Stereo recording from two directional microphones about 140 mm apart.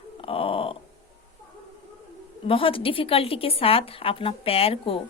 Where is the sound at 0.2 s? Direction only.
40° left (ahead or behind).